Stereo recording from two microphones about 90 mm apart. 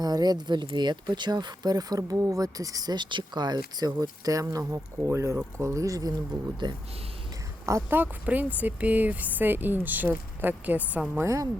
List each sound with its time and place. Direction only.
0.0 s speech: 50° right (ahead or behind)
7.6 s speech: 35° right (ahead or behind)
7.9 s speech: 20° right (ahead or behind)
11.2 s speech: 35° right (ahead or behind)